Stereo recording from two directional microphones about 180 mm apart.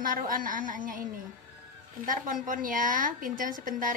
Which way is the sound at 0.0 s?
50° right (ahead or behind).